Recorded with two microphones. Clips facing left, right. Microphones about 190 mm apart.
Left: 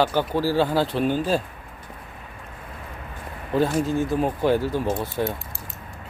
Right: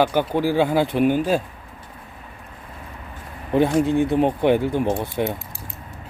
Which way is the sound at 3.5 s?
20° right (ahead or behind).